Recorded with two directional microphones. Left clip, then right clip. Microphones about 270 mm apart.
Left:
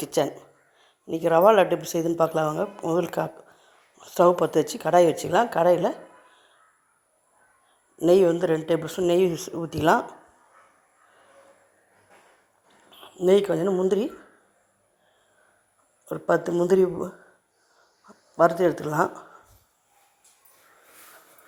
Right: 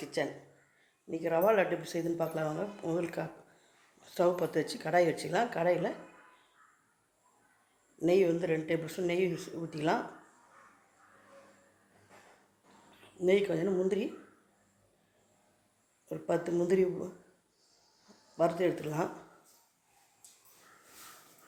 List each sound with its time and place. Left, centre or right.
0.0 s speech: left
7.9 s speech: left
13.1 s speech: left
16.0 s speech: left
18.8 s speech: left